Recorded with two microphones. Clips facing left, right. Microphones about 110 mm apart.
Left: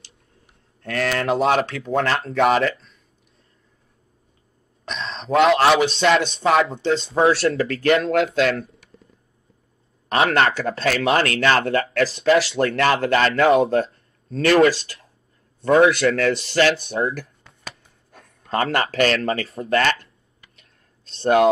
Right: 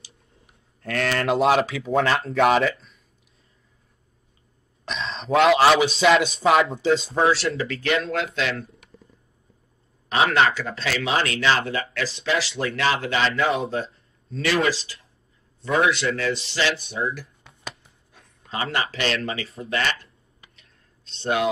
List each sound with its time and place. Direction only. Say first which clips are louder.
0.8 s a man's voice: left 1 dB; centre (ahead or behind)
4.8 s a man's voice: even; centre (ahead or behind)
7.3 s speech: left 5 dB; 45° left (ahead or behind)
10.0 s speech: left 1 dB; 50° left (ahead or behind)
12.5 s speech: left 5 dB; 55° left (ahead or behind)
17.4 s a sound: right 1 dB; centre (ahead or behind)
18.1 s speech: left 8 dB; 50° left (ahead or behind); by 19.6 s 35° left (ahead or behind)
19.7 s speech: left 6 dB; 50° left (ahead or behind)
20.3 s tick: left 1 dB; 25° right (ahead or behind)
21.2 s speech: left 7 dB; 40° left (ahead or behind)